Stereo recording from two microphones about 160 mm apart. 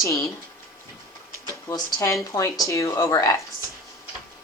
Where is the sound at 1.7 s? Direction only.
20° left (ahead or behind).